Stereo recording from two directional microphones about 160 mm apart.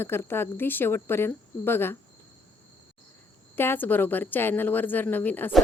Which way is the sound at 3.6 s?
10° left (ahead or behind).